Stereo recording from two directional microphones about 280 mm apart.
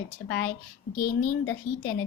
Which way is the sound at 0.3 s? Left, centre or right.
Left.